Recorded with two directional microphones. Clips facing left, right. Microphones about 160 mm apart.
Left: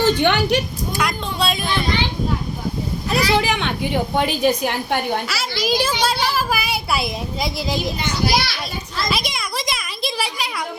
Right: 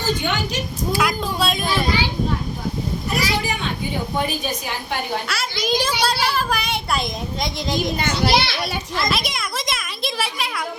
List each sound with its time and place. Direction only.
0.0 s speech: 70° left (ahead or behind)
0.9 s speech: centre (ahead or behind)
3.1 s speech: 80° left
4.6 s a woman's voice: 55° left (ahead or behind)
5.3 s speech: centre (ahead or behind)
7.9 s a child's voice: 50° right (ahead or behind)
8.3 s a child's voice: 25° right (ahead or behind)
9.0 s a child's voice: centre (ahead or behind)